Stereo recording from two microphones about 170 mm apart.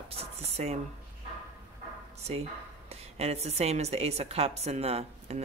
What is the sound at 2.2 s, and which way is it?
Speech, 40° right (ahead or behind).